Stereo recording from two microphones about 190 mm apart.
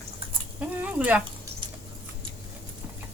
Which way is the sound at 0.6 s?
5° right (ahead or behind).